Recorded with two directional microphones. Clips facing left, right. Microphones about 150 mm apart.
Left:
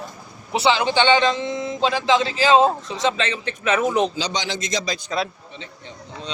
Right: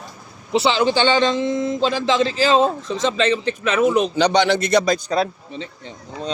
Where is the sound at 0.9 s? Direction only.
40° right (ahead or behind).